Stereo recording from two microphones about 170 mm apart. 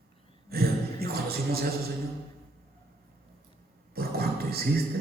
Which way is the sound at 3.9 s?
65° right (ahead or behind).